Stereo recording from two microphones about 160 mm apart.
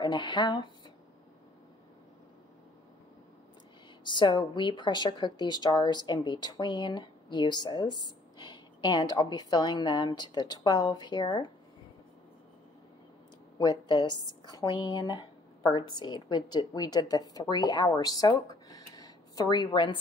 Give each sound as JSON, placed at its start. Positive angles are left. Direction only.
{"t": 0.0, "sound": "speech", "side_deg": 30}
{"t": 4.0, "sound": "speech", "side_deg": 30}
{"t": 13.6, "sound": "a woman's voice", "side_deg": 25}